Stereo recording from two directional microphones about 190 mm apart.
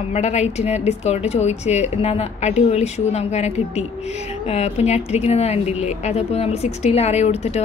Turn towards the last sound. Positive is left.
turn(degrees=35)  # may be behind; listen again after turning